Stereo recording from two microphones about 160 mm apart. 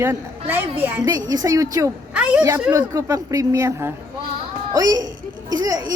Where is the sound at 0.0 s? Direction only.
15° right (ahead or behind).